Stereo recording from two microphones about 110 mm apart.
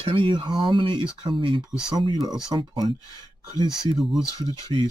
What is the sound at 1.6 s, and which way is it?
Speech, 5° right (ahead or behind).